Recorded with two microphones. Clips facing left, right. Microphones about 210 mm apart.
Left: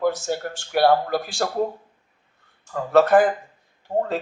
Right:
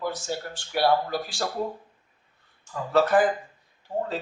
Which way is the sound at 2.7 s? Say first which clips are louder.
Left 5 dB; 50° left (ahead or behind).